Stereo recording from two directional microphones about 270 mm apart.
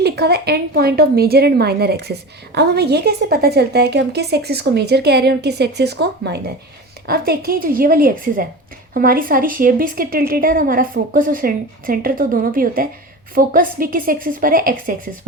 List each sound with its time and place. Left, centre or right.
0.0 s speech: right